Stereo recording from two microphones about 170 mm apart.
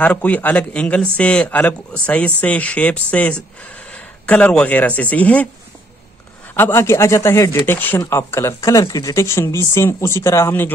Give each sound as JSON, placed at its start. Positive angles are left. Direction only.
{"t": 0.0, "sound": "speech", "side_deg": 10}
{"t": 6.5, "sound": "speech", "side_deg": 15}